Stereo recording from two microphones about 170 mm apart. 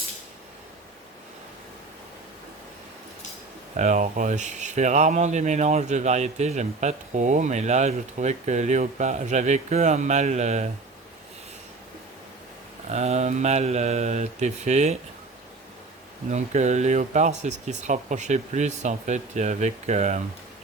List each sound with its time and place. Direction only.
3.8 s speech: 45° right (ahead or behind)
12.9 s speech: 40° right (ahead or behind)
16.3 s speech: 45° right (ahead or behind)